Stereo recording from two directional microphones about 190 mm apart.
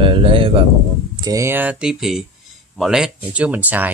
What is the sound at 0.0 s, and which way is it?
Speech, 25° right (ahead or behind).